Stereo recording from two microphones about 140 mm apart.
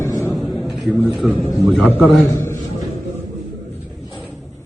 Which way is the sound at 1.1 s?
Centre (ahead or behind).